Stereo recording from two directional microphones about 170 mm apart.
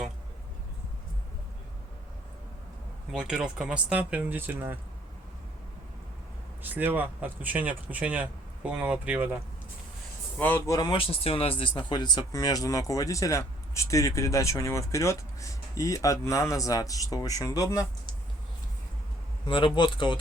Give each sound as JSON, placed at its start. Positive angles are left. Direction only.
{"t": 3.1, "sound": "speech", "side_deg": -5}
{"t": 6.6, "sound": "speech", "side_deg": -10}
{"t": 10.3, "sound": "speech", "side_deg": 10}
{"t": 10.7, "sound": "speech", "side_deg": 25}
{"t": 19.5, "sound": "speech", "side_deg": 30}